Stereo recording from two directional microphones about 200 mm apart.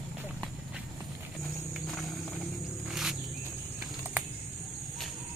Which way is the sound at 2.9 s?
Centre (ahead or behind).